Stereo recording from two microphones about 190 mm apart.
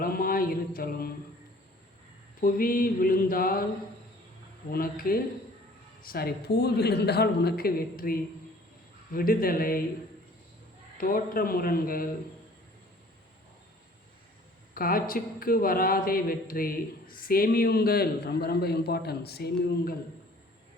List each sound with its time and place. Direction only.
0.0 s mantra: 50° left (ahead or behind)
2.4 s speech: 50° left (ahead or behind)
4.7 s a man's voice: 50° left (ahead or behind)
10.9 s speech: 45° left (ahead or behind)
14.8 s a man's voice: 50° left (ahead or behind)